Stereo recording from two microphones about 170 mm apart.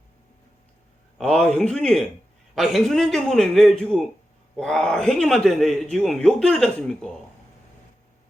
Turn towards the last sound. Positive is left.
turn(degrees=5)  # may be behind; listen again after turning